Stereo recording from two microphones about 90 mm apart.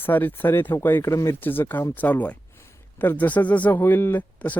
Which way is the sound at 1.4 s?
20° left (ahead or behind).